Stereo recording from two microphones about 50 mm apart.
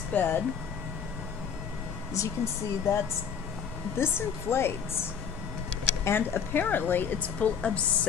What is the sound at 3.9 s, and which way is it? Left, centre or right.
Speech, left.